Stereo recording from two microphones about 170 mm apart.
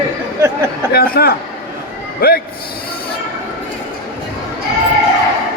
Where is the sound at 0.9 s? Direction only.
65° left (ahead or behind).